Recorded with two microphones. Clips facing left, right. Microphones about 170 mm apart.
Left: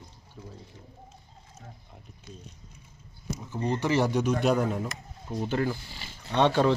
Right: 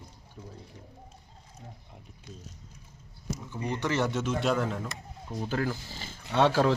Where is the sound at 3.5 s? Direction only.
25° left (ahead or behind).